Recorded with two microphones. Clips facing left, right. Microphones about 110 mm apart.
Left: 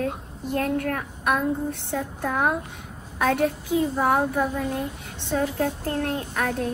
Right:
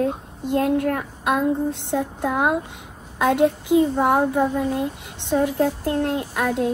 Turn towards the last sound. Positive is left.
turn(degrees=-20)  # may be behind; listen again after turning